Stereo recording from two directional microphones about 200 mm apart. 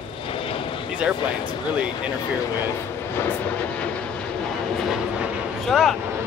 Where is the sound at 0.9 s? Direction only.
5° right (ahead or behind).